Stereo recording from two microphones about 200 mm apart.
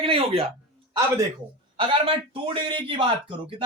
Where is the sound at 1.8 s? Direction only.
25° right (ahead or behind).